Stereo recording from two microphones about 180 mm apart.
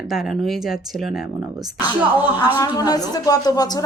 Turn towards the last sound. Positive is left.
turn(degrees=20)  # may be behind; listen again after turning